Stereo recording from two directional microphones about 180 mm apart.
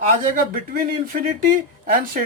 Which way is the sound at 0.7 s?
50° right (ahead or behind).